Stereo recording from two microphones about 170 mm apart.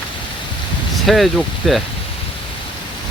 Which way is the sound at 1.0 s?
Centre (ahead or behind).